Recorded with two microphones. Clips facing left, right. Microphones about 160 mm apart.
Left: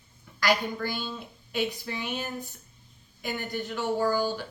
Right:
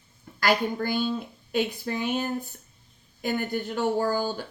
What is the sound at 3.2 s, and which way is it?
Speech, 45° right (ahead or behind).